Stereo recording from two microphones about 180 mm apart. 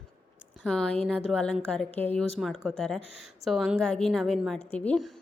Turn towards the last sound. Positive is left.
turn(degrees=5)  # may be behind; listen again after turning